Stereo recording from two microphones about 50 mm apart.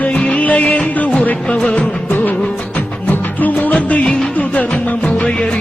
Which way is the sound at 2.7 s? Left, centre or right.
Left.